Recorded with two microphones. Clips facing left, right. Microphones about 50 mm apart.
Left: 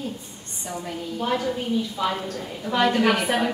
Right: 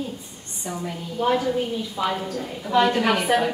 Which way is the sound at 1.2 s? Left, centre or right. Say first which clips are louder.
Right 4 dB; centre.